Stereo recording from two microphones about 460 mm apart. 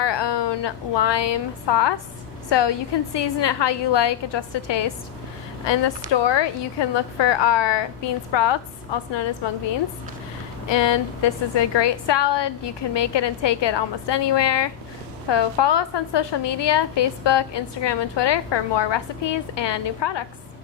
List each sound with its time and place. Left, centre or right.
0.0 s a woman's voice: left
10.7 s a woman's voice: left